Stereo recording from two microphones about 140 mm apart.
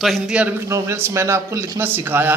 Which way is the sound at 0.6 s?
20° right (ahead or behind).